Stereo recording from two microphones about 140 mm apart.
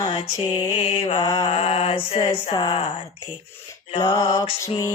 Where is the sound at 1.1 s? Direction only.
30° left (ahead or behind).